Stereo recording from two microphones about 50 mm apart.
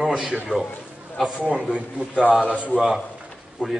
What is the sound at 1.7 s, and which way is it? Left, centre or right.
Speech, right.